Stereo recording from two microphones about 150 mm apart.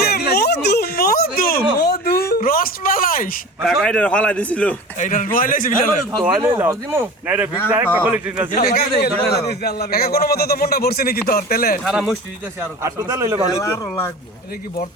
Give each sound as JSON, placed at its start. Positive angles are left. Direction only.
{"t": 0.1, "sound": "a sound", "side_deg": 90}
{"t": 3.6, "sound": "a man's voice", "side_deg": 0}
{"t": 4.9, "sound": "speech", "side_deg": 60}
{"t": 6.2, "sound": "speech", "side_deg": -15}
{"t": 8.6, "sound": "speech", "side_deg": 90}
{"t": 11.8, "sound": "speech", "side_deg": 0}
{"t": 12.8, "sound": "a man's voice", "side_deg": -20}
{"t": 13.5, "sound": "a man's voice", "side_deg": 20}